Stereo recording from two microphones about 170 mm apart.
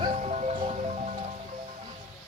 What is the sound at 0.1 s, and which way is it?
Music, 40° right (ahead or behind).